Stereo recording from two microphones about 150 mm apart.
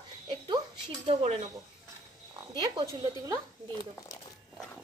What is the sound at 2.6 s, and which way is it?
Speech, 25° right (ahead or behind).